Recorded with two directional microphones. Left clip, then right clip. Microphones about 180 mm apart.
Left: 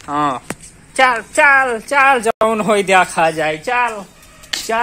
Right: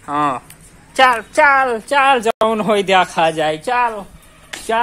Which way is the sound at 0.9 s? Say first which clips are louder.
Right 1 dB; 5° right (ahead or behind).